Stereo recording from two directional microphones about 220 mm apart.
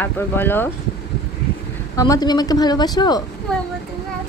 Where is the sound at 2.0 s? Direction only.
15° left (ahead or behind).